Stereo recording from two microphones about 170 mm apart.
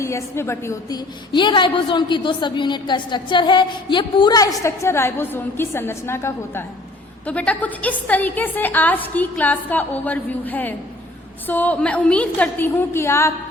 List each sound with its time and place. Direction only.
0.0 s a woman's voice: 15° left (ahead or behind)